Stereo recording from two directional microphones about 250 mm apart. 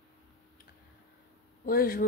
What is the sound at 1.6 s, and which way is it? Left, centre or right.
Speech, left.